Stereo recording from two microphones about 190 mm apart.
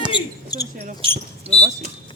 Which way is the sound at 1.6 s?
40° right (ahead or behind).